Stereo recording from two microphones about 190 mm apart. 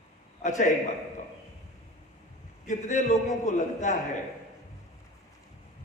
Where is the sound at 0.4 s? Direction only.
40° left (ahead or behind).